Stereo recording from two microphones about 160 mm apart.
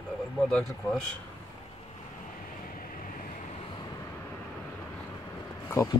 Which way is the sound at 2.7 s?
55° left (ahead or behind).